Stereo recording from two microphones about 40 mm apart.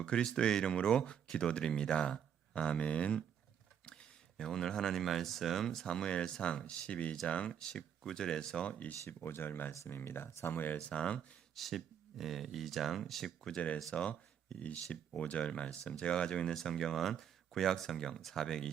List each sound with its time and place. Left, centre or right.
0.0 s speech: left
3.8 s a sound: left
4.4 s speech: centre; by 7.7 s left
7.7 s speech: centre
9.0 s speech: left
10.8 s speech: left
11.5 s speech: centre
13.9 s speech: left
16.6 s speech: centre